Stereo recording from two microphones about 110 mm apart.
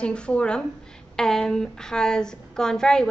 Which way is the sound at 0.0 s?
10° left (ahead or behind).